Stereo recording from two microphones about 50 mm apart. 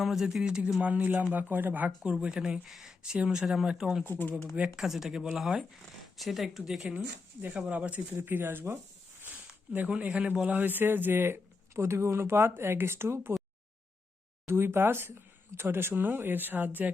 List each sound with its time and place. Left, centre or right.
0.0 s speech: centre
0.8 s a man's voice: right
1.3 s speech: right
2.1 s speech: centre
4.0 s speech: left
4.8 s speech: centre
7.6 s speech: right
8.1 s speech: right
10.0 s a man's voice: right
10.6 s speech: right
11.7 s speech: right
14.4 s speech: right